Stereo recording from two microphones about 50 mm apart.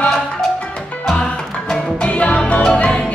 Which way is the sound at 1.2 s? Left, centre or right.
Centre.